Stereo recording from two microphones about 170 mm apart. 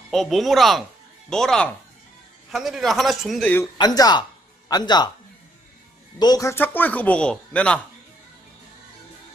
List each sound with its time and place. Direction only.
0.1 s a man's voice: centre (ahead or behind)
3.7 s speech: 25° left (ahead or behind)
6.1 s speech: 25° left (ahead or behind); by 7.8 s 5° left (ahead or behind)